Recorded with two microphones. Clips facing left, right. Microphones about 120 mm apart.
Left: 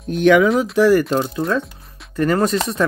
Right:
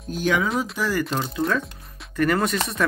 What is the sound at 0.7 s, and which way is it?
Speech, 60° left (ahead or behind).